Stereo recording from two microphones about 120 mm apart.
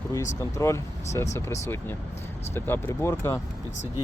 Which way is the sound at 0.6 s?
25° left (ahead or behind).